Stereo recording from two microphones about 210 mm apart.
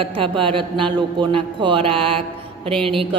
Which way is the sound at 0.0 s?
25° right (ahead or behind).